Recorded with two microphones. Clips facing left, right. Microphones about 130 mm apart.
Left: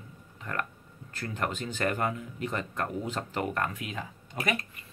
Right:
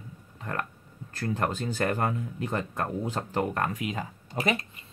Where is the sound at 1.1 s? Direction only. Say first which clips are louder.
Right 4 dB; 35° right (ahead or behind).